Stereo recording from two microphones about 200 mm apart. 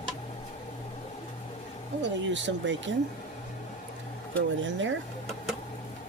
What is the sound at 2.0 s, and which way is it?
Speech, 65° right (ahead or behind).